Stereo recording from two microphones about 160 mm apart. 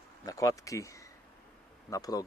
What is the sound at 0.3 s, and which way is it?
Speech, 20° left (ahead or behind).